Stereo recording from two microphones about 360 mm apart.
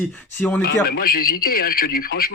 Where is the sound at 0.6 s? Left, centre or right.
Left.